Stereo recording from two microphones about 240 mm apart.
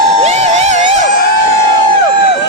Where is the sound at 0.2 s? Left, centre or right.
Right.